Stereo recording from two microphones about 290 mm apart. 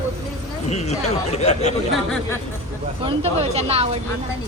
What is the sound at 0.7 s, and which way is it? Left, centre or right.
Speech, left.